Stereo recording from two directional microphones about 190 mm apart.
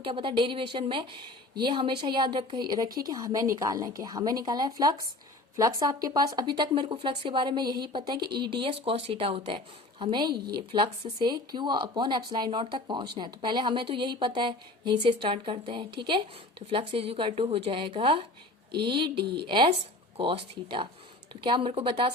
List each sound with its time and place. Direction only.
0.0 s speech: 25° right (ahead or behind)
10.3 s speech: 55° right (ahead or behind)
10.7 s speech: 25° right (ahead or behind)